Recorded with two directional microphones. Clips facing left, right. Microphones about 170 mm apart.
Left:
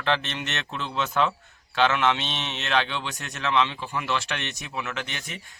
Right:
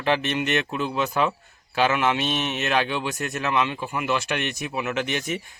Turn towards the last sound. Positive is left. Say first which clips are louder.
# right 10 dB
turn(degrees=-15)  # may be behind; listen again after turning